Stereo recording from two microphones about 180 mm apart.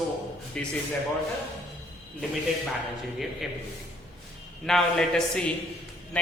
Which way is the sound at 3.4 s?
5° right (ahead or behind).